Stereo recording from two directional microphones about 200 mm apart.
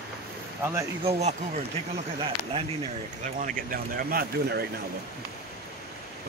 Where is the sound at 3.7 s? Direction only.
45° right (ahead or behind).